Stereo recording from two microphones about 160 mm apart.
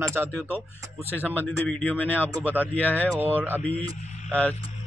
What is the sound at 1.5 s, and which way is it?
Speech, 10° left (ahead or behind).